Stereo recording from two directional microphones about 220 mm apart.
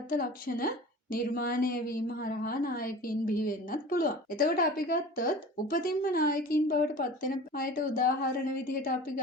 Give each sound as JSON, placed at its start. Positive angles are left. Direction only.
{"t": 0.1, "sound": "a woman's voice", "side_deg": 40}